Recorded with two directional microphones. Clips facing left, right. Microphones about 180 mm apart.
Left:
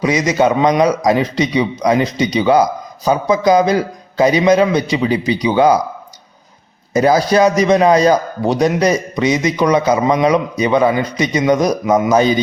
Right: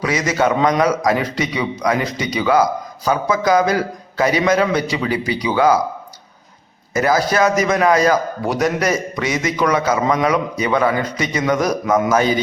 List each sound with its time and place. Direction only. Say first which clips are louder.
0.0 s a man's voice: left 4 dB; 20° left (ahead or behind)
6.9 s a man's voice: left 5 dB; 20° left (ahead or behind)